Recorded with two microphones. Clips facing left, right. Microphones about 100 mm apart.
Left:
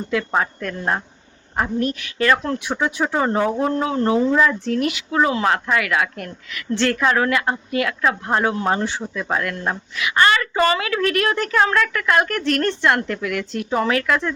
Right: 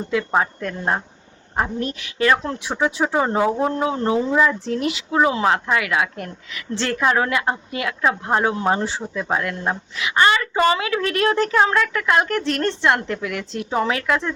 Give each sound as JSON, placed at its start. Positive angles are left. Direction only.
{"t": 0.6, "sound": "speech", "side_deg": -15}
{"t": 2.7, "sound": "speech", "side_deg": -5}
{"t": 4.6, "sound": "speech", "side_deg": -25}